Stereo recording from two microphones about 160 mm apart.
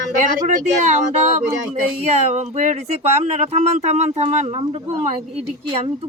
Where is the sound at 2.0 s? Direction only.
40° right (ahead or behind).